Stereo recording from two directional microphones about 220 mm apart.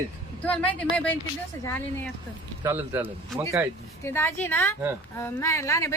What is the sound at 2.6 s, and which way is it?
Speech, 10° right (ahead or behind).